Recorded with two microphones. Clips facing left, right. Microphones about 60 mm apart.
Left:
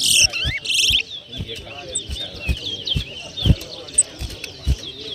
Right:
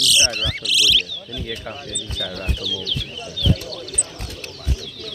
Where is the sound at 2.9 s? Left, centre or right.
Left.